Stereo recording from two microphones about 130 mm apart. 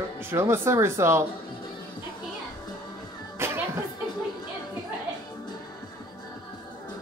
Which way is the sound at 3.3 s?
20° right (ahead or behind).